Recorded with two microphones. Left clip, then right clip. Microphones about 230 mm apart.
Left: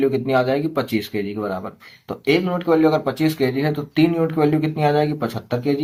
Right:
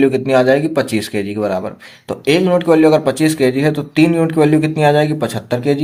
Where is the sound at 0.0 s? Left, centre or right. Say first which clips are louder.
Right 6 dB; right.